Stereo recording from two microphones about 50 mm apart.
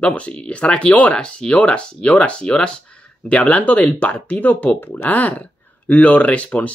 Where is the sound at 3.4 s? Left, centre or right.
Left.